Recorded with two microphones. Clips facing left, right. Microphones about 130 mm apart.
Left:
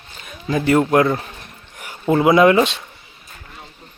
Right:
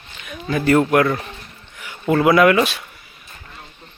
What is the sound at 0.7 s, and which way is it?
Speech, 20° left (ahead or behind).